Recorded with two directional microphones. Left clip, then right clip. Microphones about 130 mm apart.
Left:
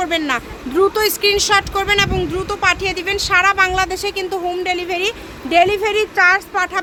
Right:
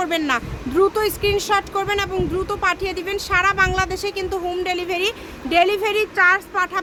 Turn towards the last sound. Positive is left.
turn(degrees=20)  # may be behind; listen again after turning